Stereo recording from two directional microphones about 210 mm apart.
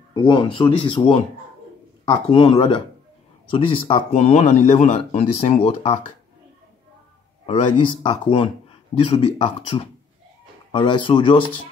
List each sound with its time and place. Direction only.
0.1 s speech: 25° left (ahead or behind)
7.8 s speech: 20° left (ahead or behind)